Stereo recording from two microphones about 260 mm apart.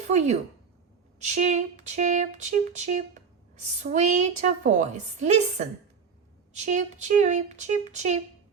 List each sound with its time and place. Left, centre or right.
0.1 s a woman's voice: right